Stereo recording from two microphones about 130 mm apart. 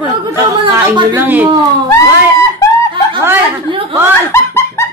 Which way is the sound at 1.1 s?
15° right (ahead or behind).